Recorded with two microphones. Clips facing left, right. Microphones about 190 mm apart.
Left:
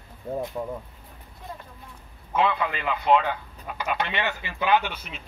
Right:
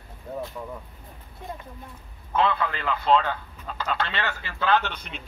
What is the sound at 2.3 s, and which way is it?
A man's voice, 15° left (ahead or behind).